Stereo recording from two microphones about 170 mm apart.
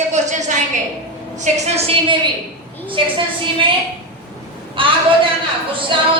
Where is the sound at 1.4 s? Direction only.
35° right (ahead or behind).